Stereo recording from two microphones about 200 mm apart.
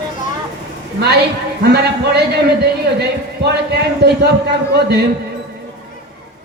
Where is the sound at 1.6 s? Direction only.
55° right (ahead or behind).